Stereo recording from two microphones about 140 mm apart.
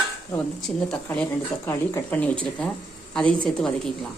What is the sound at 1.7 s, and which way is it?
A woman's voice, 15° left (ahead or behind).